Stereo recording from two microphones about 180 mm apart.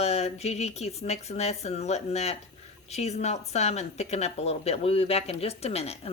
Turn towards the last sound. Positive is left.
turn(degrees=35)  # may be behind; listen again after turning